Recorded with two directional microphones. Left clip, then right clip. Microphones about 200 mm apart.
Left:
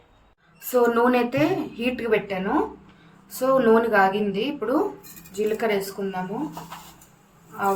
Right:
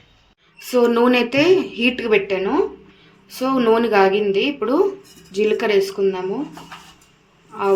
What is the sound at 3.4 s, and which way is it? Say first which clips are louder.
A woman's voice: right 1 dB; 35° right (ahead or behind).